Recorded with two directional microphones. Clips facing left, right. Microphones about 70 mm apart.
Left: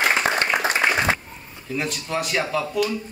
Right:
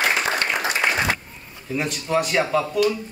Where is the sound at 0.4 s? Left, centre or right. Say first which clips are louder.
Left 2 dB; left.